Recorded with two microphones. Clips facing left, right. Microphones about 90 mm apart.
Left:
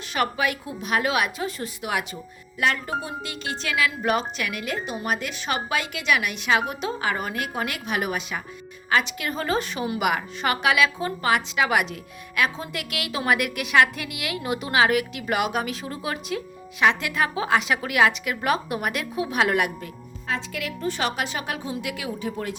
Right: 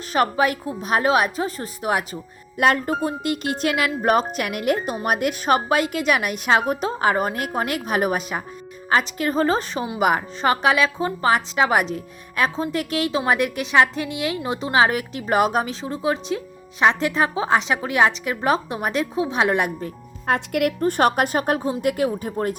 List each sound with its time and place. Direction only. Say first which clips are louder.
0.1 s a woman's voice: right 5 dB; 35° right (ahead or behind)
20.2 s speech: right 9 dB; 60° right (ahead or behind); by 22.5 s 45° right (ahead or behind)